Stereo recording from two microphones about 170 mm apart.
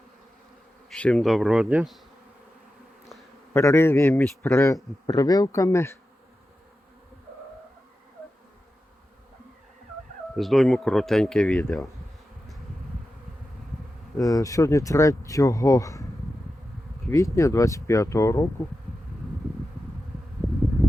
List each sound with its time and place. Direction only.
0.9 s speech: 5° left (ahead or behind)
3.5 s a man's voice: 15° left (ahead or behind)
10.3 s speech: centre (ahead or behind)
14.2 s speech: 20° left (ahead or behind)
17.1 s a man's voice: 20° left (ahead or behind)